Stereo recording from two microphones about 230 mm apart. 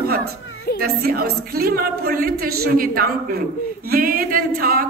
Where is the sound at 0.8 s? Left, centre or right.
Right.